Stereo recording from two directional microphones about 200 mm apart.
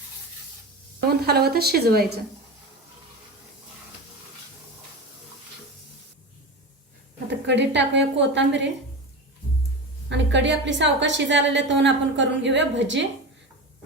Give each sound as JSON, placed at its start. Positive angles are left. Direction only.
{"t": 1.3, "sound": "a woman's voice", "side_deg": -50}
{"t": 7.3, "sound": "a woman's voice", "side_deg": -60}
{"t": 10.1, "sound": "a woman's voice", "side_deg": -65}